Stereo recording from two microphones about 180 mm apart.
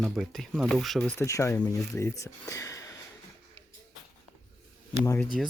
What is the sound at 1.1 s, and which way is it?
Speech, 15° left (ahead or behind).